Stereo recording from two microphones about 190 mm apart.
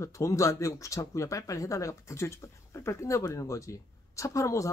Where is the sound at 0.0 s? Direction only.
15° left (ahead or behind).